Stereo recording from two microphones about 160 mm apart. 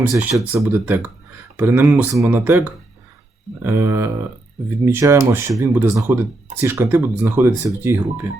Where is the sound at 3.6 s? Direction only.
15° right (ahead or behind).